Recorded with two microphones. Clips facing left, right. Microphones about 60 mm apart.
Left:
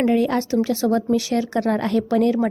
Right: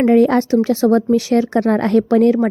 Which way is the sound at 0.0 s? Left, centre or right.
Right.